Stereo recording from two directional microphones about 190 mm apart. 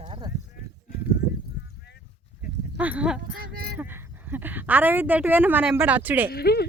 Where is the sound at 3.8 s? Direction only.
10° right (ahead or behind).